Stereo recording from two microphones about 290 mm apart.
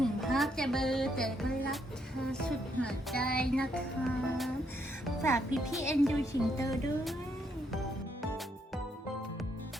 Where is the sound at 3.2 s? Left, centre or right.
Left.